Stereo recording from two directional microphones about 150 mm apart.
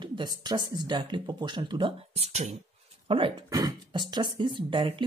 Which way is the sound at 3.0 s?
35° right (ahead or behind).